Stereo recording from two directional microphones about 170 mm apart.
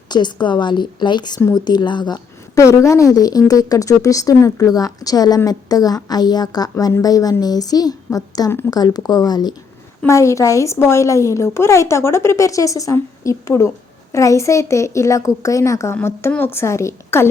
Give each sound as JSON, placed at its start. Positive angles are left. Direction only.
{"t": 0.1, "sound": "a woman's voice", "side_deg": 25}